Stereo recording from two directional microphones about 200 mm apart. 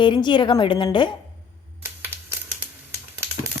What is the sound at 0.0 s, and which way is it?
A woman's voice, 25° left (ahead or behind).